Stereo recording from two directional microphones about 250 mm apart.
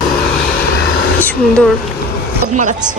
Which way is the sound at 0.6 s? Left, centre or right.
Left.